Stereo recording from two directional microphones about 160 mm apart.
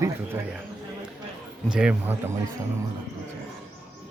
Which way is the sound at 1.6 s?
5° right (ahead or behind).